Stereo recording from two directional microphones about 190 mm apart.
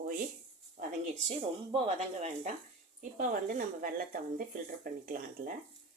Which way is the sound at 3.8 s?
50° right (ahead or behind).